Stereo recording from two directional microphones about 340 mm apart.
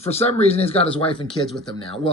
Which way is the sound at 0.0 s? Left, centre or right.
Centre.